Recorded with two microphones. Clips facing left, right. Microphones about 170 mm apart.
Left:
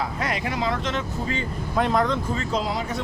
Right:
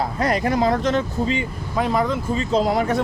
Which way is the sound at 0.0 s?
40° right (ahead or behind).